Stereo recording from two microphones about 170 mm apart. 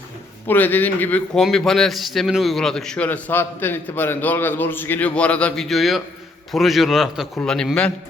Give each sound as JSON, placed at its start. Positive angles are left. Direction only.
{"t": 0.4, "sound": "a man's voice", "side_deg": 10}